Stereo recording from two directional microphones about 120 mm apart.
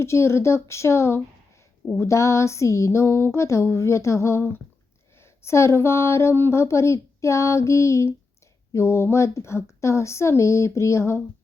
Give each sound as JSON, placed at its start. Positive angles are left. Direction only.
{"t": 0.0, "sound": "speech", "side_deg": 20}